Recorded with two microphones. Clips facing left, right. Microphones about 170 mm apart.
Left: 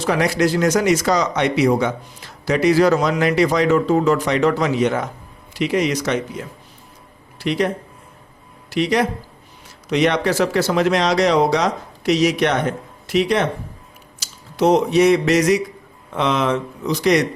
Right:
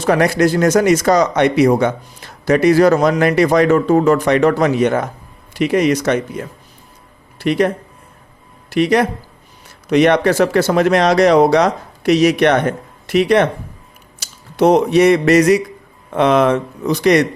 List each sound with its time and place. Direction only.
0.0 s speech: 50° right (ahead or behind)
8.7 s speech: 55° right (ahead or behind)